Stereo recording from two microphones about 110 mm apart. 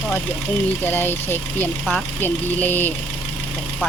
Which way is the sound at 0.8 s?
20° left (ahead or behind).